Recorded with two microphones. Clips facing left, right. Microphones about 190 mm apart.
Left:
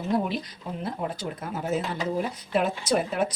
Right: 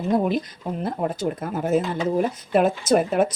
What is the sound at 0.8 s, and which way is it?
Speech, 50° right (ahead or behind).